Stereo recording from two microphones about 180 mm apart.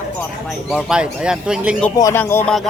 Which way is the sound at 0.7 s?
Centre (ahead or behind).